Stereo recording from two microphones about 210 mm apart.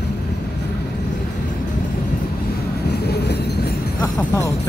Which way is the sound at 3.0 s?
50° left (ahead or behind).